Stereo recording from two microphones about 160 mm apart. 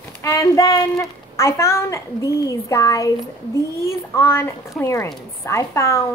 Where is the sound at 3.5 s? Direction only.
15° left (ahead or behind).